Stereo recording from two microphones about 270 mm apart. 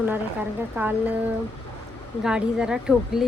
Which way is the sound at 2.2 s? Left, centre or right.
Centre.